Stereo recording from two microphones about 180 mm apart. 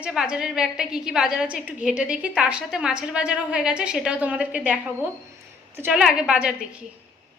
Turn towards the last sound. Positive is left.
turn(degrees=-5)  # may be behind; listen again after turning